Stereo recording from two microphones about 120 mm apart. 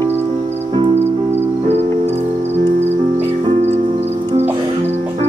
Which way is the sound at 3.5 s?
70° right (ahead or behind).